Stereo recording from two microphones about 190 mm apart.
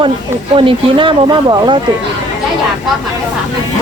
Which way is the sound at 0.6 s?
25° right (ahead or behind).